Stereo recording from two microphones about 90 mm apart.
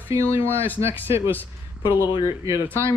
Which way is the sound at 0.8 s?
25° right (ahead or behind).